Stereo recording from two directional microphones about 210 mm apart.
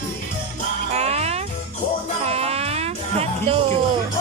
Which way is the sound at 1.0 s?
30° right (ahead or behind).